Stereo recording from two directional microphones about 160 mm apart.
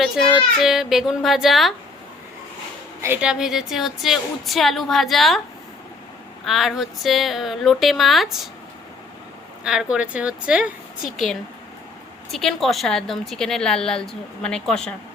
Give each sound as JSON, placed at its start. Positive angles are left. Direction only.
{"t": 0.6, "sound": "a woman's voice", "side_deg": 0}
{"t": 3.0, "sound": "a woman's voice", "side_deg": -10}
{"t": 6.4, "sound": "a woman's voice", "side_deg": 0}
{"t": 9.6, "sound": "a woman's voice", "side_deg": -5}